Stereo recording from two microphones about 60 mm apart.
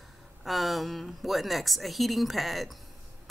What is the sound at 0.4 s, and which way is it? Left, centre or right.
A woman's voice, centre.